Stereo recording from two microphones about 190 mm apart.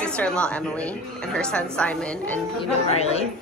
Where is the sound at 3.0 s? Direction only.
35° left (ahead or behind).